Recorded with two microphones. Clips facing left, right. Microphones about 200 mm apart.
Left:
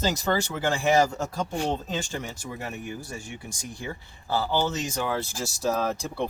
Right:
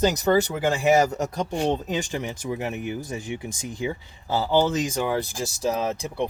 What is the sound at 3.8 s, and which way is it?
Speech, 15° right (ahead or behind).